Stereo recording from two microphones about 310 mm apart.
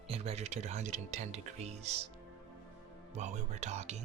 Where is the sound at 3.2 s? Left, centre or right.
Right.